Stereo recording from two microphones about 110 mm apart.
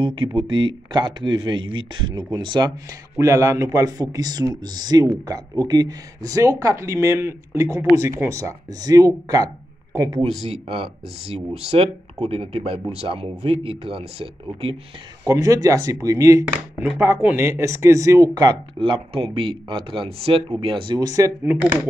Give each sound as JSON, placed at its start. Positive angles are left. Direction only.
{"t": 0.0, "sound": "a man's voice", "side_deg": -50}
{"t": 10.5, "sound": "speech", "side_deg": -50}
{"t": 11.8, "sound": "speech", "side_deg": -65}
{"t": 15.2, "sound": "a man's voice", "side_deg": -30}
{"t": 18.8, "sound": "speech", "side_deg": -55}